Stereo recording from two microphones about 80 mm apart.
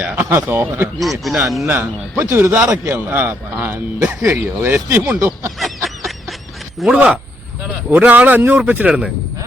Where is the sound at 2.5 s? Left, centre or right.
Right.